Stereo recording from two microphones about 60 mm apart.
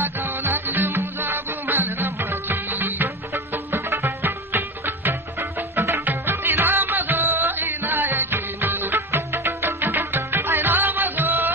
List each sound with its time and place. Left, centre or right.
0.0 s music: right
3.5 s music: right
5.4 s music: right
6.0 s music: right